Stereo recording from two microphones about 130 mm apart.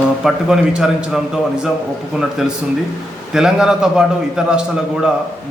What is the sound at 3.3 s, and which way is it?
A man's voice, 5° right (ahead or behind).